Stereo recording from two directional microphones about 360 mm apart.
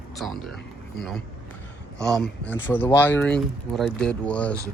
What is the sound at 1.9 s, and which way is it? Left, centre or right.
Speech, centre.